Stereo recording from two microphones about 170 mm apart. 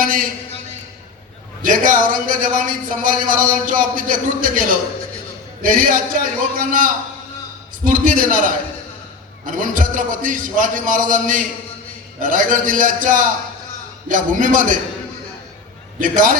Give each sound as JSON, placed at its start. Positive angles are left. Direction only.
{"t": 0.0, "sound": "a sound", "side_deg": -55}
{"t": 1.6, "sound": "speech", "side_deg": -50}
{"t": 16.0, "sound": "speech", "side_deg": -50}